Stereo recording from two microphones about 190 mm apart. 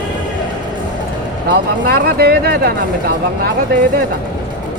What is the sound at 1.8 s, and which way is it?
Speech, 55° right (ahead or behind).